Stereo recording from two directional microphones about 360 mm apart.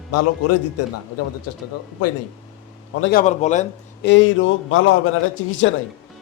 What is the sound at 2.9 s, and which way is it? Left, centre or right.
A man's voice, left.